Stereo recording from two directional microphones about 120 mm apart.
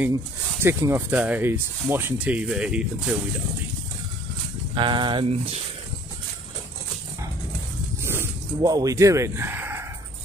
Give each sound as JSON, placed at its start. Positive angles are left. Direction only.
{"t": 0.6, "sound": "speech", "side_deg": -20}
{"t": 4.7, "sound": "speech", "side_deg": -40}
{"t": 8.0, "sound": "a sound", "side_deg": -20}
{"t": 8.5, "sound": "speech", "side_deg": -35}